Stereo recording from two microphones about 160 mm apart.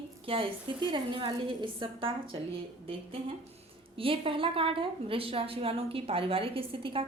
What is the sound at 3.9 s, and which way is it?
A woman's voice, 35° right (ahead or behind).